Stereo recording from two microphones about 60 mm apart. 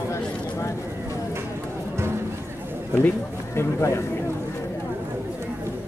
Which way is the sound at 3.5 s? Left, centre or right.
Left.